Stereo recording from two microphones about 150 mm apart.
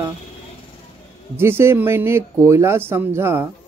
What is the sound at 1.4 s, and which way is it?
Speech, 15° right (ahead or behind).